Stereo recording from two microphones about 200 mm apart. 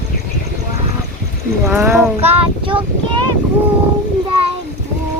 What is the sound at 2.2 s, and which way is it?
Child singing, 30° right (ahead or behind).